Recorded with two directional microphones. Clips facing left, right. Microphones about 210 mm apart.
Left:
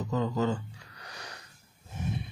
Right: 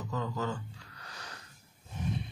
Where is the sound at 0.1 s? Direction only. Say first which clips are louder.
Left 6 dB; 20° left (ahead or behind).